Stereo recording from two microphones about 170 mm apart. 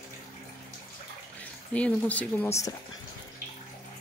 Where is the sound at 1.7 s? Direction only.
10° left (ahead or behind).